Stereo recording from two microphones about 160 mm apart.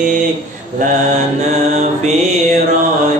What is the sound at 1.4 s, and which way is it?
Mantra, 45° right (ahead or behind).